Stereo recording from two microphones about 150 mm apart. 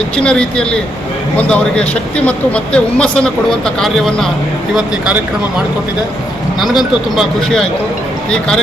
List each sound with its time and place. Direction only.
0.2 s a man's voice: 5° left (ahead or behind)